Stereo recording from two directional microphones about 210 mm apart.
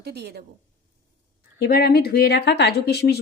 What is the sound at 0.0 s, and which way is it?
Speech, 50° right (ahead or behind).